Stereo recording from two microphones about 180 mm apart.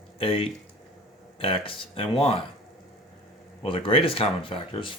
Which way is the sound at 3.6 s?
30° left (ahead or behind).